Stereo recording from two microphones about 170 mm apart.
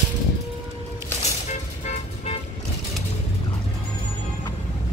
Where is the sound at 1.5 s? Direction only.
40° left (ahead or behind).